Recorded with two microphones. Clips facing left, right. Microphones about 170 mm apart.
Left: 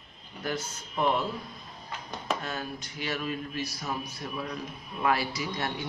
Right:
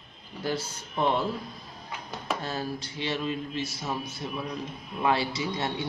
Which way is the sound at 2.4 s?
30° right (ahead or behind).